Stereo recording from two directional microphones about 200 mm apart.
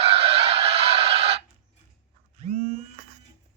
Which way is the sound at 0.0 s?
30° right (ahead or behind).